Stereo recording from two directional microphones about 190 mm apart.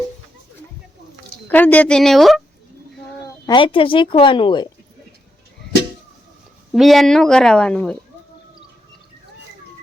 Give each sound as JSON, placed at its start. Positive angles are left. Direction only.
{"t": 1.5, "sound": "speech", "side_deg": 10}
{"t": 3.2, "sound": "speech", "side_deg": 20}
{"t": 6.7, "sound": "speech", "side_deg": 0}